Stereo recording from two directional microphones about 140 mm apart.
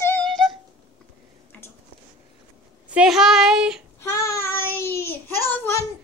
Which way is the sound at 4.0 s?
20° left (ahead or behind).